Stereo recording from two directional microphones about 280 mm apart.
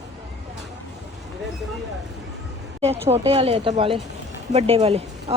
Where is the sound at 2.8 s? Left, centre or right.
Right.